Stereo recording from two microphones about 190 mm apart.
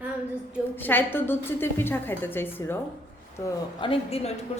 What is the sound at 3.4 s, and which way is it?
Speech, 25° left (ahead or behind).